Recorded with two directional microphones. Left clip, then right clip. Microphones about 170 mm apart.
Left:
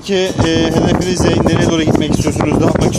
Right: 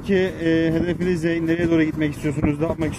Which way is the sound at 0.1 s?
40° left (ahead or behind).